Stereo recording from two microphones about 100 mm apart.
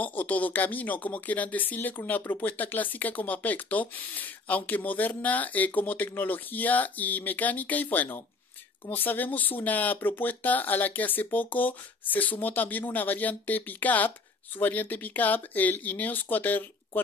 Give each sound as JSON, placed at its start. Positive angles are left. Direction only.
{"t": 0.0, "sound": "speech", "side_deg": 15}